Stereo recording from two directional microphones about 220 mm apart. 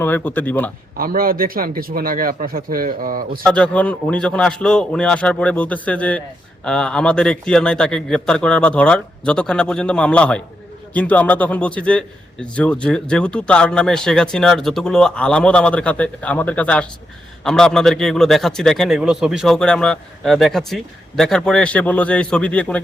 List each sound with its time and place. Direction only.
0.0 s speech: 10° left (ahead or behind)
0.9 s a man's voice: 40° right (ahead or behind)
3.4 s a man's voice: 5° left (ahead or behind)